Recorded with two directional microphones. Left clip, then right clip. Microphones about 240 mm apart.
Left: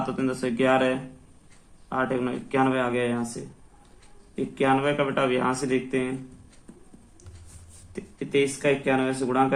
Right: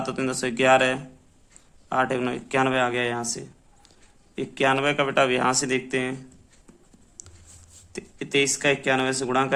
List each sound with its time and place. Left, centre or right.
0.0 s speech: right
4.4 s speech: right
7.9 s speech: right